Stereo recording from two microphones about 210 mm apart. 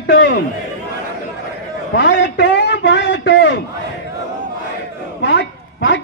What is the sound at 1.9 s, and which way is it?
A man's voice, 55° left (ahead or behind).